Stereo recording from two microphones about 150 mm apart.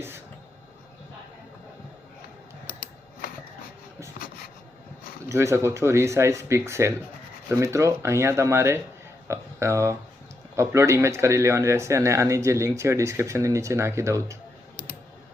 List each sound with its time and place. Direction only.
5.3 s speech: 20° right (ahead or behind)